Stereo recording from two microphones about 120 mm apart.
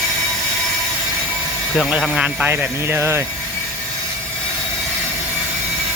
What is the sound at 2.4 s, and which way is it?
Speech, 20° right (ahead or behind).